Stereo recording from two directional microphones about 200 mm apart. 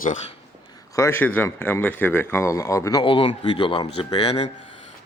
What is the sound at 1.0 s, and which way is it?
Speech, 10° left (ahead or behind).